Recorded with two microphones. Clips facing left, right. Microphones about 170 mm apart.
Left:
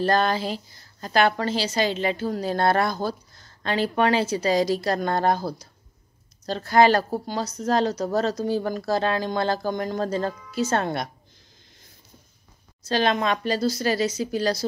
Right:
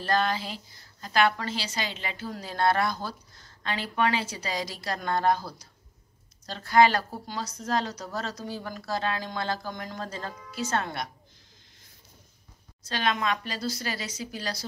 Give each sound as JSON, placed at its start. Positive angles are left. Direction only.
{"t": 0.0, "sound": "speech", "side_deg": 40}
{"t": 7.2, "sound": "speech", "side_deg": 25}
{"t": 7.6, "sound": "speech", "side_deg": 35}
{"t": 12.8, "sound": "speech", "side_deg": 35}